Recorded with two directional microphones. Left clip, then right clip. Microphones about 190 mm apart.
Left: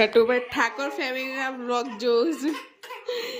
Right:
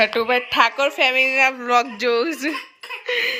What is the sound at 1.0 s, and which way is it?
Speech, 15° right (ahead or behind).